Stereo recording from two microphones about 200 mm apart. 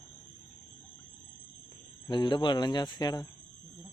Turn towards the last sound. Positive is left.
turn(degrees=20)  # may be behind; listen again after turning